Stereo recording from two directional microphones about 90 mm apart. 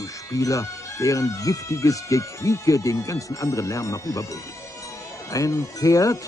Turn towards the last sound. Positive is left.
turn(degrees=40)  # may be behind; listen again after turning